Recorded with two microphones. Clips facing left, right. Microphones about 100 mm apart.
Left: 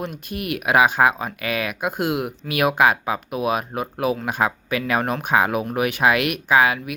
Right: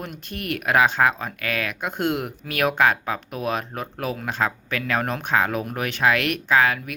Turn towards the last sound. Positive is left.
turn(degrees=10)  # may be behind; listen again after turning